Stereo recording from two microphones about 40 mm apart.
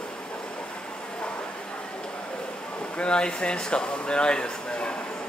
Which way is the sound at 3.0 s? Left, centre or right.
Left.